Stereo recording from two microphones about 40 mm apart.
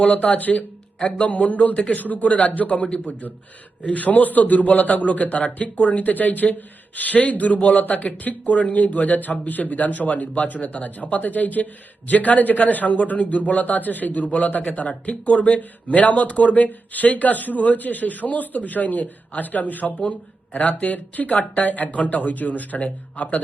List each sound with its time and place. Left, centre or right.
0.0 s a man's voice: left
0.5 s a sound: left
1.1 s a man's voice: left
2.0 s a man's voice: left